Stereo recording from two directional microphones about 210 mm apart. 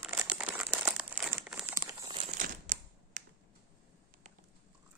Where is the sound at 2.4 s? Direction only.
40° right (ahead or behind).